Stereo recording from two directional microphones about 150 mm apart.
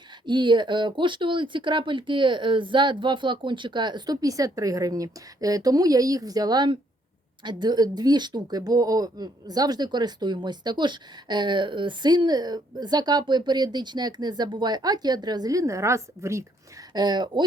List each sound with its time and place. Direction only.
0.3 s speech: 30° right (ahead or behind)